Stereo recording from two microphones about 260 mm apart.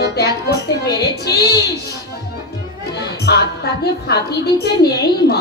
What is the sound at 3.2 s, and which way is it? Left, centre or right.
A woman's voice, left.